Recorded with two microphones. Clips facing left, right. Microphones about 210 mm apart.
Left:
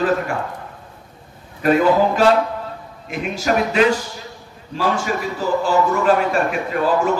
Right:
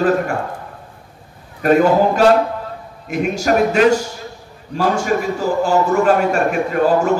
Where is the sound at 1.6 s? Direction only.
45° right (ahead or behind).